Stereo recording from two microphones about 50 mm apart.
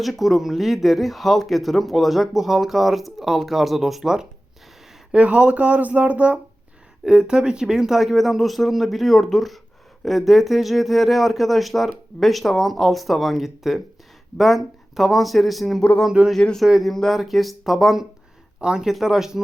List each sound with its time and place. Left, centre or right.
0.0 s speech: centre
5.1 s speech: right; by 15.8 s centre
16.2 s speech: right
16.8 s speech: centre